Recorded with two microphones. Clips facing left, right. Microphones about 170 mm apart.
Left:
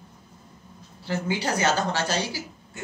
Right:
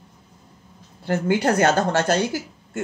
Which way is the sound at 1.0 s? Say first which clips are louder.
Right 7 dB; 55° right (ahead or behind).